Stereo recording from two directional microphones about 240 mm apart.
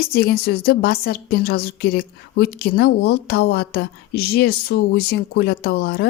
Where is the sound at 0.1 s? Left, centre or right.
Left.